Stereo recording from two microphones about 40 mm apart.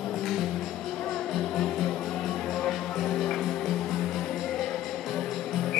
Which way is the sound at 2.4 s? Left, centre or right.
Centre.